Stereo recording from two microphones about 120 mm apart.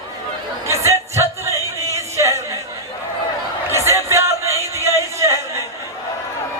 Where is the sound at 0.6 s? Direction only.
25° right (ahead or behind).